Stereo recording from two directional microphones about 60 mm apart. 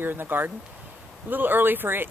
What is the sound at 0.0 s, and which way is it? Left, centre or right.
Speech, right.